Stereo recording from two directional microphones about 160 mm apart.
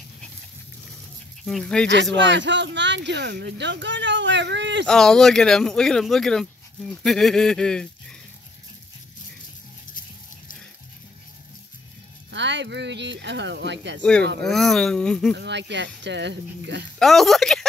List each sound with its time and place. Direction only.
1.4 s speech: 5° left (ahead or behind)
2.2 s speech: 90° right
4.8 s speech: 5° left (ahead or behind)
12.3 s speech: 90° right
14.4 s speech: centre (ahead or behind)
15.3 s speech: 90° right
17.0 s speech: centre (ahead or behind)